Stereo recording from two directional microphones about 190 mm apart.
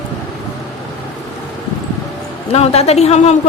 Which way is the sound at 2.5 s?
35° left (ahead or behind).